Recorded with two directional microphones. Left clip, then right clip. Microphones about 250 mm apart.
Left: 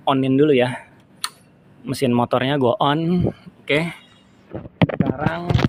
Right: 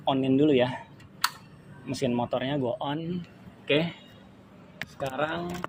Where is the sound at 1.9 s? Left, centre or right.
Left.